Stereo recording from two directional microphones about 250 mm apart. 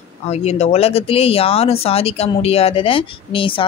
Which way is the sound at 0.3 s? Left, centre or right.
Left.